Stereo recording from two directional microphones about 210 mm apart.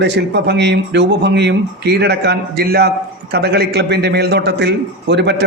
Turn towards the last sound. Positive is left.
turn(degrees=-55)  # may be behind; listen again after turning